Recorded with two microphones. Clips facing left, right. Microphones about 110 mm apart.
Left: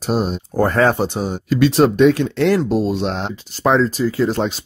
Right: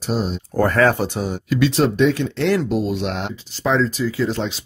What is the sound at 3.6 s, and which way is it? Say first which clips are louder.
Speech: left 3 dB; 55° left (ahead or behind).